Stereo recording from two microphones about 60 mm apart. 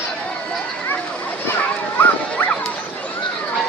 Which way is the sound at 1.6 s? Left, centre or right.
Left.